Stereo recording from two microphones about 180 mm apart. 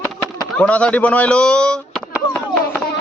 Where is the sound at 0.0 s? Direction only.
10° left (ahead or behind).